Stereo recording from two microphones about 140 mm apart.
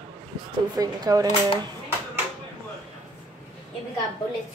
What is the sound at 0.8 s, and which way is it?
Speech, 25° right (ahead or behind).